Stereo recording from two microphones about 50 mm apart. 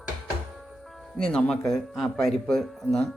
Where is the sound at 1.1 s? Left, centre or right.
Centre.